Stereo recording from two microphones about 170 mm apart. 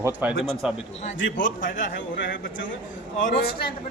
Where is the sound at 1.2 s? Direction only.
90° left.